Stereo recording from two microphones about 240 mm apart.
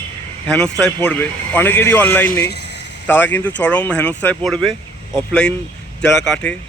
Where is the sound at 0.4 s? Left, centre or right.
Centre.